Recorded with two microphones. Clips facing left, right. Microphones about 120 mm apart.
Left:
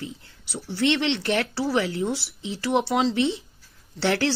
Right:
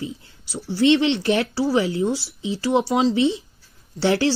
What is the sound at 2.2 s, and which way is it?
Speech, 65° left (ahead or behind).